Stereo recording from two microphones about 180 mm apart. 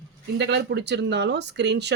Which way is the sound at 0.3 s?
70° right (ahead or behind).